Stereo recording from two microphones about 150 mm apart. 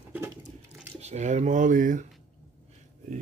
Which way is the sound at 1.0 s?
50° right (ahead or behind).